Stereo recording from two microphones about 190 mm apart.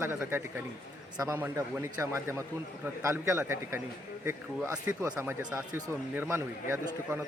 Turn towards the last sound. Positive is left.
turn(degrees=-15)  # may be behind; listen again after turning